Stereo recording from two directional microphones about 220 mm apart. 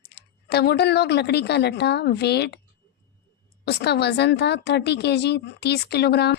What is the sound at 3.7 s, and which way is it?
A woman's voice, 50° left (ahead or behind).